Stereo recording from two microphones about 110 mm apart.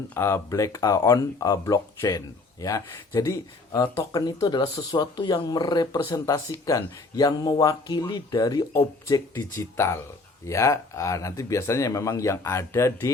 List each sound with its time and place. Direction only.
0.1 s speech: 25° left (ahead or behind)